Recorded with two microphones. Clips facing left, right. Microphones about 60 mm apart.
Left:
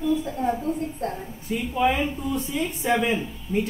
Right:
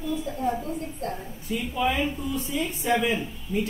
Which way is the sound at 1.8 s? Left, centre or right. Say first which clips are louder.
Left 3 dB; left.